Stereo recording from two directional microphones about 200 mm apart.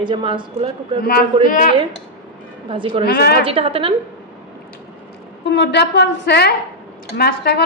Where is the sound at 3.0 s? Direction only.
50° left (ahead or behind).